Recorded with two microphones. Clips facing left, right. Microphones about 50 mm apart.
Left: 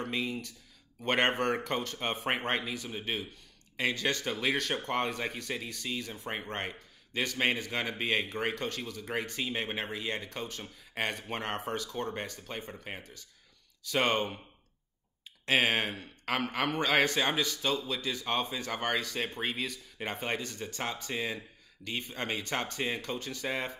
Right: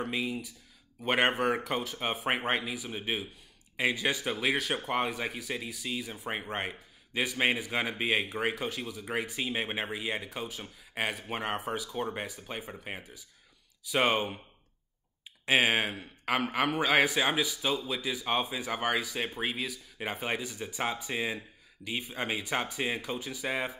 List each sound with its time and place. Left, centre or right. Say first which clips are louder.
0.0 s speech: right 1 dB; centre
15.4 s speech: right 2 dB; centre